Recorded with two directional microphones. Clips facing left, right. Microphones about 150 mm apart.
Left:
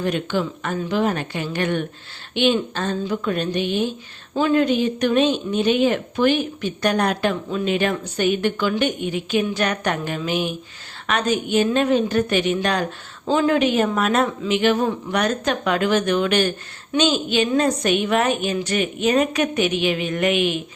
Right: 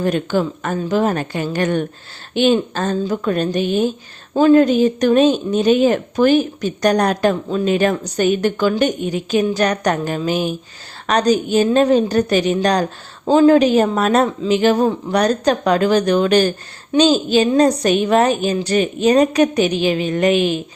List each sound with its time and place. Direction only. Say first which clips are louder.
0.0 s a woman's voice: right 4 dB; 40° right (ahead or behind)